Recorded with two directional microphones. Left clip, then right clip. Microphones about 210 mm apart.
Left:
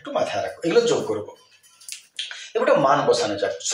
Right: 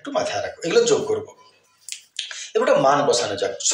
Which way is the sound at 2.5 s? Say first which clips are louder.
Right 1 dB; 25° right (ahead or behind).